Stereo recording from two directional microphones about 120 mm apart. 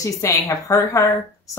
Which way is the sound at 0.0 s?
25° left (ahead or behind).